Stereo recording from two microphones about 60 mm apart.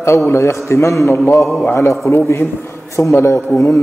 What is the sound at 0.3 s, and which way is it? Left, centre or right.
A man's voice, left.